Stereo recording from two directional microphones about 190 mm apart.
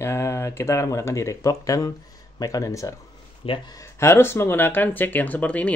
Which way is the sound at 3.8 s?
15° left (ahead or behind).